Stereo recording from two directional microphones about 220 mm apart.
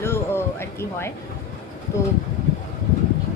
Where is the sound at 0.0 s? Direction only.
10° left (ahead or behind).